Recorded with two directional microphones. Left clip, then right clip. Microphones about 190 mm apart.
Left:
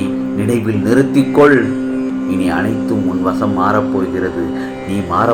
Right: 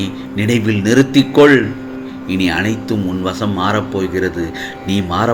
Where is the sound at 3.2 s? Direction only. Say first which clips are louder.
Left 3 dB; 65° right (ahead or behind).